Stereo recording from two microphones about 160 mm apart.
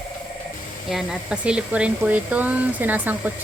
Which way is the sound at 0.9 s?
5° right (ahead or behind).